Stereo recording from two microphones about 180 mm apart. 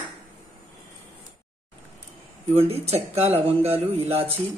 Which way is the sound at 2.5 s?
35° right (ahead or behind).